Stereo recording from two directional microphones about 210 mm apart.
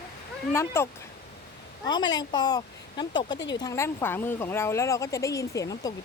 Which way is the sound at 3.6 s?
15° left (ahead or behind).